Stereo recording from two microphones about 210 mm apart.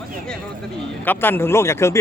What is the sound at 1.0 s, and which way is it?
Speech, 10° left (ahead or behind).